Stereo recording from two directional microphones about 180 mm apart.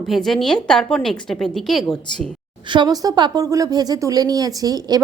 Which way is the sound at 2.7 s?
20° right (ahead or behind).